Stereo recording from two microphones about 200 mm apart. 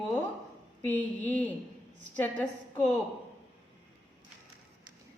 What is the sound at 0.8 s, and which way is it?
A woman's voice, 10° left (ahead or behind).